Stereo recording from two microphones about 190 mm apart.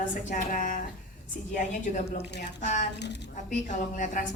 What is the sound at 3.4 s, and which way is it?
Speech, 40° left (ahead or behind).